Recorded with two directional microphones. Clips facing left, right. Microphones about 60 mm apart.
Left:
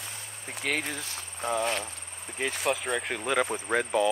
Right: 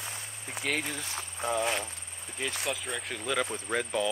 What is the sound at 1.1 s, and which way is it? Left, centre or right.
Speech, centre.